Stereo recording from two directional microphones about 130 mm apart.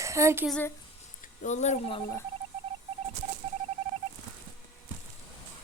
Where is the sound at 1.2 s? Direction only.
70° left (ahead or behind).